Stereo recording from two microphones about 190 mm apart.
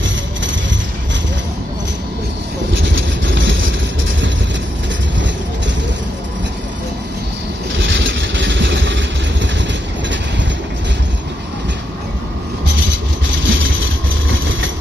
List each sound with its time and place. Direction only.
2.8 s vehicle: 75° right (ahead or behind)
7.8 s vehicle: 75° right (ahead or behind)
13.5 s vehicle: 80° right